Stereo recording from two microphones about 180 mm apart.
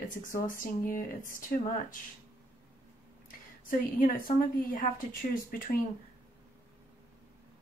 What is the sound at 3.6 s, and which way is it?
A woman's voice, 50° left (ahead or behind).